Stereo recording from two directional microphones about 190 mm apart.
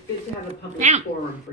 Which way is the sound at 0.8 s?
40° right (ahead or behind).